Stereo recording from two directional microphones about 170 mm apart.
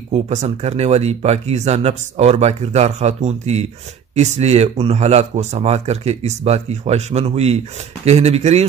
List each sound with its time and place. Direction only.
0.1 s speech: 40° right (ahead or behind)